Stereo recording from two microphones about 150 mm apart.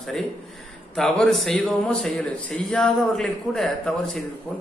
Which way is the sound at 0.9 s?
5° left (ahead or behind).